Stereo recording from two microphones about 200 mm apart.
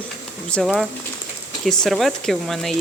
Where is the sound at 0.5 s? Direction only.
Centre (ahead or behind).